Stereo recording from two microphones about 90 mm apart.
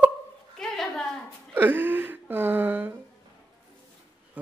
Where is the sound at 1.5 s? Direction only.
20° right (ahead or behind).